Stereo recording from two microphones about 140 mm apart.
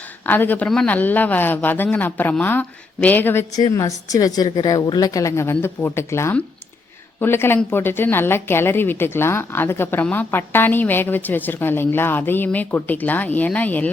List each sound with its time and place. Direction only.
0.3 s speech: 15° left (ahead or behind)
3.5 s a woman's voice: 25° left (ahead or behind)